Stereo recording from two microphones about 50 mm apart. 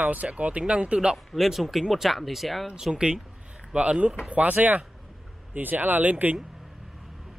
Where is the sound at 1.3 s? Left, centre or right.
Centre.